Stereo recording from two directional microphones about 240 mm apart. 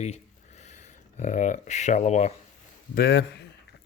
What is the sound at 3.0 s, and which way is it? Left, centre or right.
Speech, left.